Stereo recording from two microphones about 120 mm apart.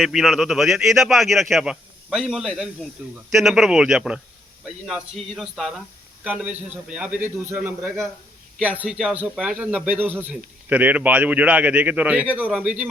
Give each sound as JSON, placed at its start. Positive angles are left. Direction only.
{"t": 0.0, "sound": "a man's voice", "side_deg": -5}